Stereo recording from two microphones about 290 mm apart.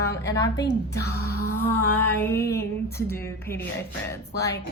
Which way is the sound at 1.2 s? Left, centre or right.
Left.